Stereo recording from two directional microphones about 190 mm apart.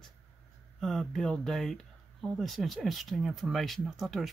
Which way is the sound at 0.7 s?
Centre (ahead or behind).